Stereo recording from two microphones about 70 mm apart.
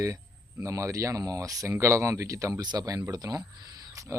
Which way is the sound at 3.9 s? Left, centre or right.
Right.